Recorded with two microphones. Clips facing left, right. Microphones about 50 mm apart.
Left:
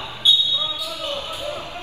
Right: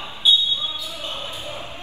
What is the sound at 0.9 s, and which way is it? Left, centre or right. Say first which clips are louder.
Basketball bounce: left 3 dB; left.